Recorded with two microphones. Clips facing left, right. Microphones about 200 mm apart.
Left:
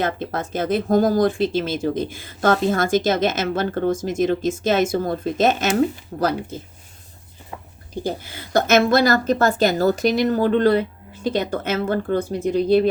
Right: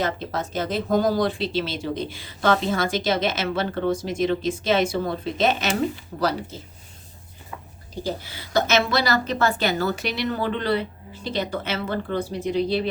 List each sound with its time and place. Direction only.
0.0 s speech: 50° left (ahead or behind)
8.0 s speech: 50° left (ahead or behind)